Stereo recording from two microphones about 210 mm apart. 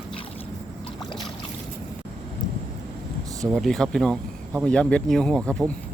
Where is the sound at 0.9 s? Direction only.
20° left (ahead or behind).